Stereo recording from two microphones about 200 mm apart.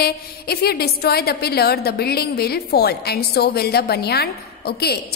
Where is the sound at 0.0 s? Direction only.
50° left (ahead or behind).